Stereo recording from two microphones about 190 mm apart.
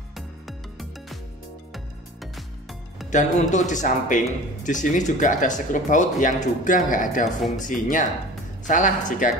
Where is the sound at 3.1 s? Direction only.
40° left (ahead or behind).